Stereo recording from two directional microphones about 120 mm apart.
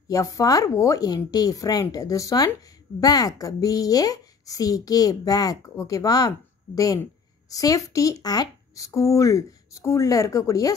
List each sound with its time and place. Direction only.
0.1 s a child's voice: 30° left (ahead or behind)